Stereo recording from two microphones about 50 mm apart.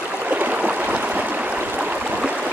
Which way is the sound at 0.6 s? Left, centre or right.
Right.